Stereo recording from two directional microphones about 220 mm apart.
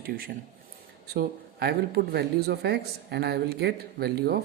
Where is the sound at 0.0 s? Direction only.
45° right (ahead or behind).